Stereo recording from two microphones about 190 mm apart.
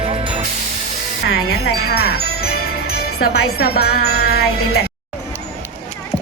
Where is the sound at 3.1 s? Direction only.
90° left.